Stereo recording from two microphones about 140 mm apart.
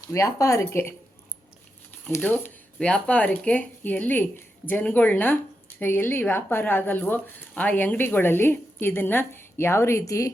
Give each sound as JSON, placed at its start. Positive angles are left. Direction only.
{"t": 0.1, "sound": "speech", "side_deg": 25}
{"t": 2.0, "sound": "speech", "side_deg": 15}